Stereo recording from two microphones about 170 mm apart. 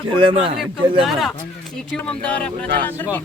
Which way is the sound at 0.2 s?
30° right (ahead or behind).